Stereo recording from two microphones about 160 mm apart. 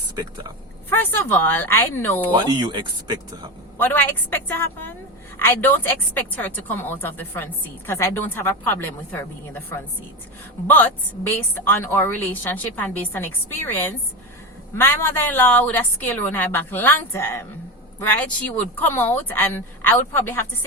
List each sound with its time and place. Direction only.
0.9 s a woman's voice: 10° left (ahead or behind)
2.3 s speech: 30° right (ahead or behind)
3.8 s a woman's voice: 10° left (ahead or behind)